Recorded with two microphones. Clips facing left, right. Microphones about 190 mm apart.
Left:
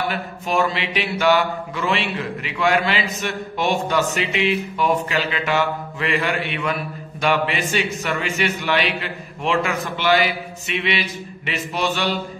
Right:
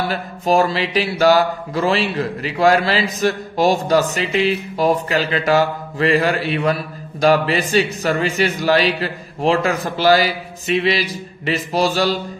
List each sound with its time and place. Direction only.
0.1 s speech: 35° right (ahead or behind)